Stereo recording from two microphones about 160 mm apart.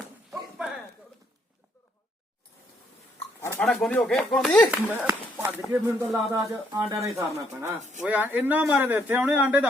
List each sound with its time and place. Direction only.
0.3 s a sound: 5° right (ahead or behind)
3.6 s speech: 5° left (ahead or behind)
4.7 s speech: 15° right (ahead or behind)